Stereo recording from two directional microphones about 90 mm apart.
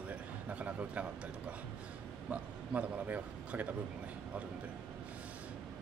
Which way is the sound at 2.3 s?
15° right (ahead or behind).